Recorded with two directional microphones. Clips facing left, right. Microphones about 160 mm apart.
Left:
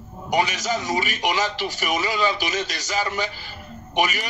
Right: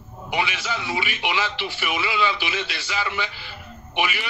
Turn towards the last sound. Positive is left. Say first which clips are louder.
# left 3 dB
turn(degrees=40)  # may be behind; listen again after turning